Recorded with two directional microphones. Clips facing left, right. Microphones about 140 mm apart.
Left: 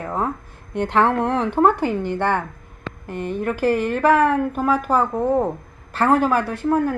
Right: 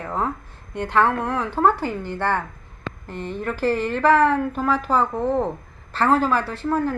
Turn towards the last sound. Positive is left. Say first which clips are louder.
# left 3 dB
turn(degrees=15)  # may be behind; listen again after turning